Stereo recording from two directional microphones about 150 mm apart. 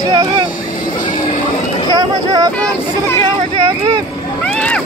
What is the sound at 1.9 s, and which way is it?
Speech, 25° right (ahead or behind).